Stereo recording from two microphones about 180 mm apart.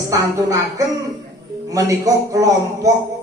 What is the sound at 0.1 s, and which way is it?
A man's voice, 20° right (ahead or behind).